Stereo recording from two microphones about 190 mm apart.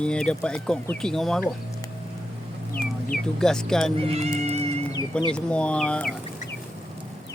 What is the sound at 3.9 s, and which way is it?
Music, 30° right (ahead or behind).